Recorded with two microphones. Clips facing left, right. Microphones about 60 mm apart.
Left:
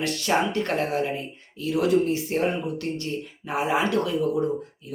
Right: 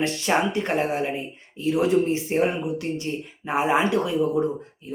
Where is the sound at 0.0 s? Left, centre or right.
Right.